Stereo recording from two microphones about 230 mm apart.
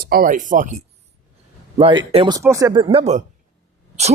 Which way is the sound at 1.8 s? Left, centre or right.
Right.